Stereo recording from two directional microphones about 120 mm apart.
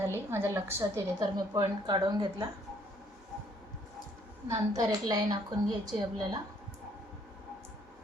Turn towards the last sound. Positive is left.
turn(degrees=-35)  # may be behind; listen again after turning